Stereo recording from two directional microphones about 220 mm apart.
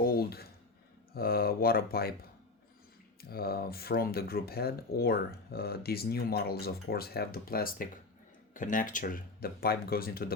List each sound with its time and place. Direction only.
0.0 s a sound: 45° left (ahead or behind)
1.1 s speech: 45° left (ahead or behind)
3.2 s speech: 45° left (ahead or behind)